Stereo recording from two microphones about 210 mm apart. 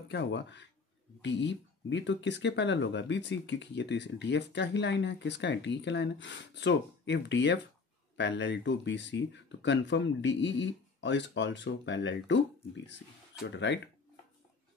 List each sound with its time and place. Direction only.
0.1 s speech: 55° left (ahead or behind)